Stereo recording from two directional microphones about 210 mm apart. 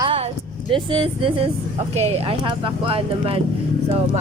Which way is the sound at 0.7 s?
25° right (ahead or behind).